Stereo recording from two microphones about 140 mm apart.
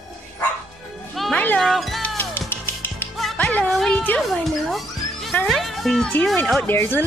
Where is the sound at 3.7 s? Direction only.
5° left (ahead or behind).